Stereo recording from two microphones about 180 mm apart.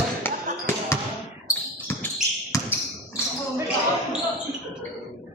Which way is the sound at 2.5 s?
20° left (ahead or behind).